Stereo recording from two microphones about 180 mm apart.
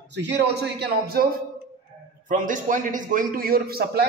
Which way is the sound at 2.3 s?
45° right (ahead or behind).